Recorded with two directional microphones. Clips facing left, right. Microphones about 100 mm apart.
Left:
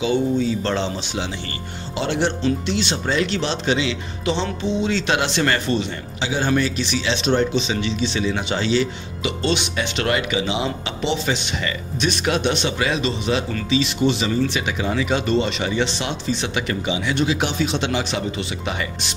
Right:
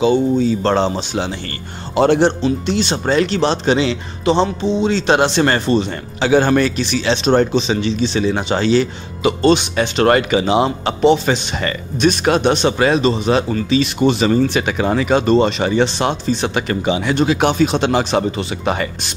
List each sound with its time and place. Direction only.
0.0 s speech: 40° right (ahead or behind)
6.2 s speech: 55° right (ahead or behind)